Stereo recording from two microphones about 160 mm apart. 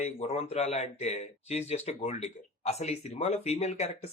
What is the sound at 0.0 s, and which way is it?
Speech, 40° left (ahead or behind).